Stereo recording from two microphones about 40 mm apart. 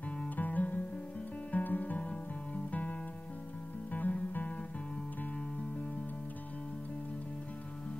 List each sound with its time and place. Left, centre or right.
0.4 s music: left